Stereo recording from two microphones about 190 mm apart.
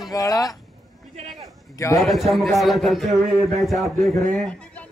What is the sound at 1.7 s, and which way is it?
Speech, 15° left (ahead or behind).